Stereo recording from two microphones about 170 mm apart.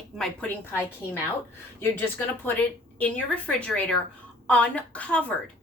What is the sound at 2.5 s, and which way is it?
A woman's voice, 10° left (ahead or behind).